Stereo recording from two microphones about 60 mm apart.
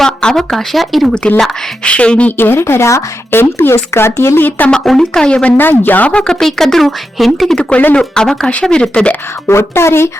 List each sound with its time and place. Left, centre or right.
0.0 s speech: centre
1.8 s a woman's voice: centre
2.4 s speech: left
4.7 s speech: centre
5.5 s speech: left
6.1 s speech: centre
7.7 s a woman's voice: left
7.9 s speech: centre
9.5 s speech: left